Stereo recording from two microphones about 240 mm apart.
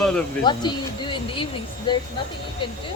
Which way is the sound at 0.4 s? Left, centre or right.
Centre.